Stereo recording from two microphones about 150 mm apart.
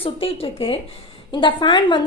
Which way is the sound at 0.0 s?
40° left (ahead or behind).